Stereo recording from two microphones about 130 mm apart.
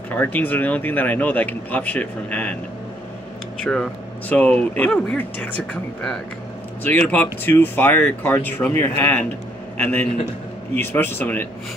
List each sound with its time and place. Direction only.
0.1 s speech: 15° left (ahead or behind)
3.6 s a man's voice: 5° left (ahead or behind)